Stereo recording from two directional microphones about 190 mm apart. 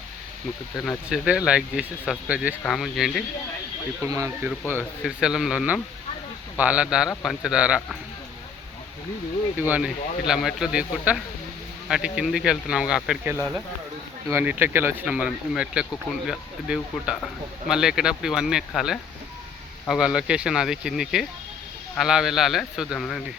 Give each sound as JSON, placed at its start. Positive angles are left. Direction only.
{"t": 0.9, "sound": "speech", "side_deg": -5}
{"t": 4.0, "sound": "speech", "side_deg": -15}
{"t": 4.7, "sound": "speech", "side_deg": -5}
{"t": 9.6, "sound": "speech", "side_deg": -10}